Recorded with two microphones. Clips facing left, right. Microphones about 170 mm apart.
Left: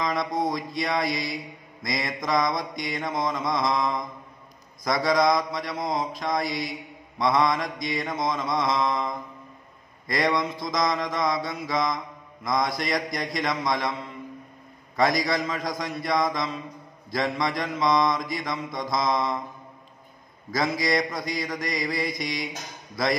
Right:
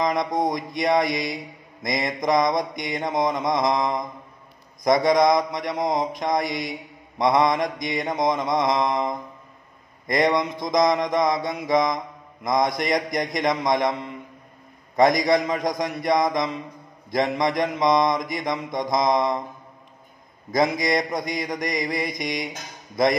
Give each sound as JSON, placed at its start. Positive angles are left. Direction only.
{"t": 0.0, "sound": "mantra", "side_deg": -20}
{"t": 15.0, "sound": "mantra", "side_deg": -20}
{"t": 20.5, "sound": "mantra", "side_deg": -20}